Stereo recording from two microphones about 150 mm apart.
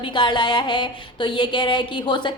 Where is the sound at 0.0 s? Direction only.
30° left (ahead or behind).